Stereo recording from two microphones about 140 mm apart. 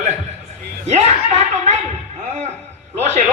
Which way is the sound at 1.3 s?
55° right (ahead or behind).